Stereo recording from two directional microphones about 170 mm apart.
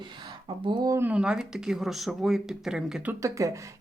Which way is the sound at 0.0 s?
25° right (ahead or behind).